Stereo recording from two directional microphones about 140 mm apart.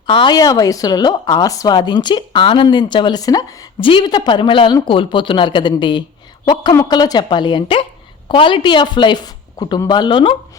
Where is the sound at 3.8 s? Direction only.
35° left (ahead or behind).